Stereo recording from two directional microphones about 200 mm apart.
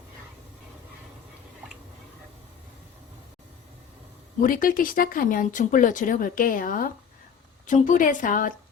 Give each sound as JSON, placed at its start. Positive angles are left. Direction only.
{"t": 4.4, "sound": "a woman's voice", "side_deg": 45}